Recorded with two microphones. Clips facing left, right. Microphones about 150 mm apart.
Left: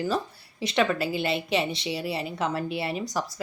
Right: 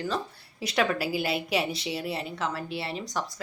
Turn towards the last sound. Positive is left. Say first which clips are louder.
# left 4 dB
turn(degrees=15)  # may be behind; listen again after turning